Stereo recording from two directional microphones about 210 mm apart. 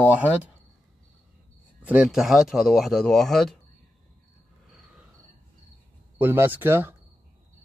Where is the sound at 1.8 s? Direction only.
5° right (ahead or behind).